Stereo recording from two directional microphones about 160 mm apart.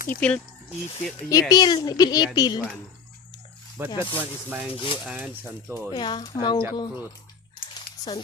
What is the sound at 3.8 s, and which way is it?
Speech, 15° right (ahead or behind).